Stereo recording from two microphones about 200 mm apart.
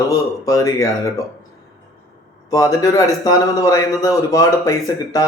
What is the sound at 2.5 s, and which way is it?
A man's voice, 15° left (ahead or behind).